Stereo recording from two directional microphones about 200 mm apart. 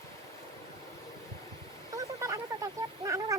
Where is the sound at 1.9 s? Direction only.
15° right (ahead or behind).